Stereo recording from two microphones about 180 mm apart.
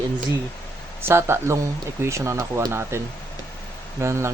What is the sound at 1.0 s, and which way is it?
Speech, 15° right (ahead or behind).